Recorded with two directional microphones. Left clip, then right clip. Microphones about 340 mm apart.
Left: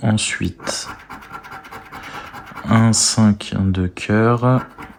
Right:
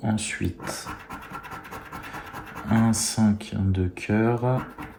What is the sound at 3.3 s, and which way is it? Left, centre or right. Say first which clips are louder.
Speech: left 7 dB; centre.